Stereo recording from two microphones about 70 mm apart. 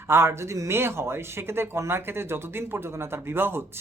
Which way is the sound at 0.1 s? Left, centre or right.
Right.